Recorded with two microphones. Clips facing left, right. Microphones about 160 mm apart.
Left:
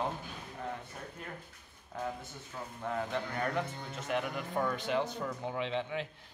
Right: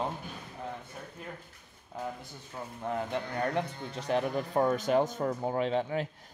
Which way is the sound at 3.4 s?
30° right (ahead or behind).